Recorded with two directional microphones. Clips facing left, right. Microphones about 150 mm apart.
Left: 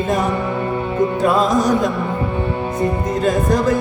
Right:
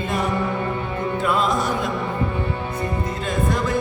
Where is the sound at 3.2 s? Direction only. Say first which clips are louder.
Left 7 dB; 40° left (ahead or behind).